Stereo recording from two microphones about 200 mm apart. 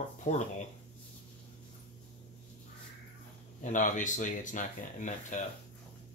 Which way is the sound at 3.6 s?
40° left (ahead or behind).